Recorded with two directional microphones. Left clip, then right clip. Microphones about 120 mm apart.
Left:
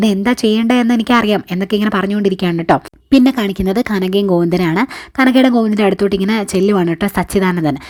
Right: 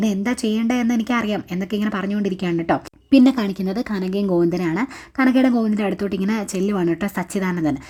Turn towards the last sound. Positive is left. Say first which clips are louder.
# left 7 dB
turn(degrees=35)  # may be behind; listen again after turning